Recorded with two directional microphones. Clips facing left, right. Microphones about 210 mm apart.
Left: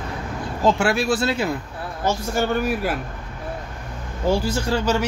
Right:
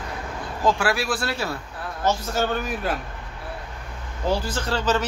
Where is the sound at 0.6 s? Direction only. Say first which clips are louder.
Left 3 dB; 25° left (ahead or behind); by 2.9 s 10° left (ahead or behind).